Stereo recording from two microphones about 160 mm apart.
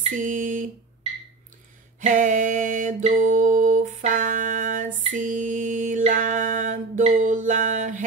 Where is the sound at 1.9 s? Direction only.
55° right (ahead or behind).